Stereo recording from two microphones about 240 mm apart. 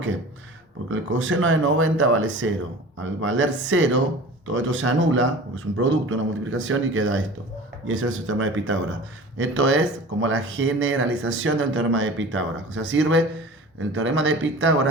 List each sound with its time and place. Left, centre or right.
0.9 s speech: right